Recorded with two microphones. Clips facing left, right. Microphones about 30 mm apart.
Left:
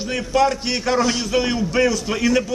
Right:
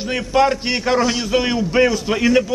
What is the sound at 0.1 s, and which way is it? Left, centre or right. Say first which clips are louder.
A man's voice: right 2 dB; right.